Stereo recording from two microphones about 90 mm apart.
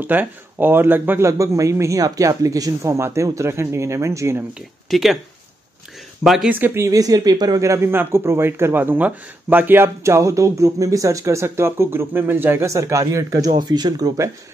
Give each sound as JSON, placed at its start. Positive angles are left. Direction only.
{"t": 0.0, "sound": "speech", "side_deg": -20}
{"t": 1.4, "sound": "speech", "side_deg": -35}
{"t": 4.8, "sound": "speech", "side_deg": 0}
{"t": 6.2, "sound": "speech", "side_deg": -5}
{"t": 6.5, "sound": "speech", "side_deg": -25}
{"t": 6.9, "sound": "speech", "side_deg": -45}
{"t": 12.6, "sound": "speech", "side_deg": -35}
{"t": 13.6, "sound": "speech", "side_deg": -50}